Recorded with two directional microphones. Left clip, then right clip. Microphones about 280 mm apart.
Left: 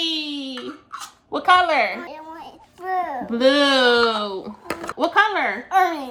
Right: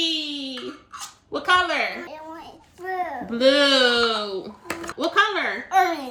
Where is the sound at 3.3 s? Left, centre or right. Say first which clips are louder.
Left 1 dB; left.